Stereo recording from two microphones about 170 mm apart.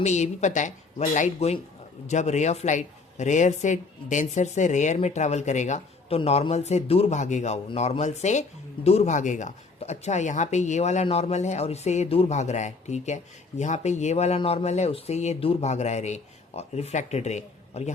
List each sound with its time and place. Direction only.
0.0 s speech: 40° left (ahead or behind)